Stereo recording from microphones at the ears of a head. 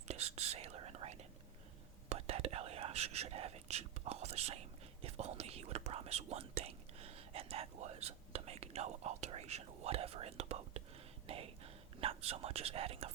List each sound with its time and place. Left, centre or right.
0.1 s whispering: right